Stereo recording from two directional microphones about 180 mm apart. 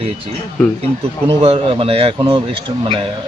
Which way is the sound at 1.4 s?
30° right (ahead or behind).